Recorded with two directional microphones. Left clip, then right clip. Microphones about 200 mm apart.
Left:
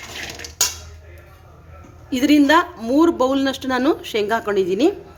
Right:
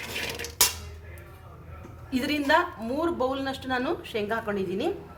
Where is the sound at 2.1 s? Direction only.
55° left (ahead or behind).